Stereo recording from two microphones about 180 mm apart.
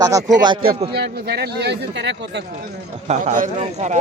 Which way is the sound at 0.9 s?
60° right (ahead or behind).